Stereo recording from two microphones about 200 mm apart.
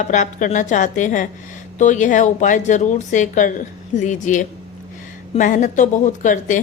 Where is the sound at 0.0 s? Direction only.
35° left (ahead or behind).